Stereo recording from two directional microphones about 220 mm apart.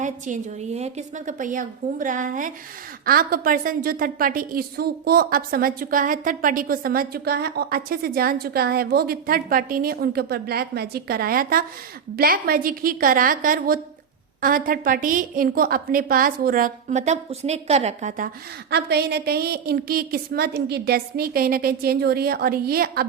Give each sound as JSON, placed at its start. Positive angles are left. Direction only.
{"t": 0.0, "sound": "a woman's voice", "side_deg": -30}
{"t": 18.7, "sound": "a woman's voice", "side_deg": -45}